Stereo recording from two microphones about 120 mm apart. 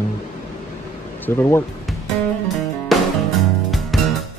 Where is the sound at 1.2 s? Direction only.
20° left (ahead or behind).